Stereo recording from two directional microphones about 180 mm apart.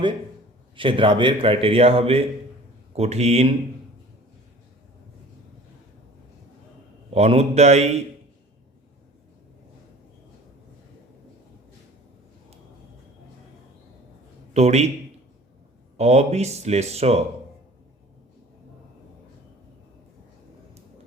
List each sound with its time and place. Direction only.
0.8 s a man's voice: 30° right (ahead or behind)
7.1 s a man's voice: 35° right (ahead or behind)
14.5 s a man's voice: 35° right (ahead or behind)
16.0 s a man's voice: 35° right (ahead or behind)